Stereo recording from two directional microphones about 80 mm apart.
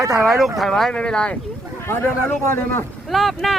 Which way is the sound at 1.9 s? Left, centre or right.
Left.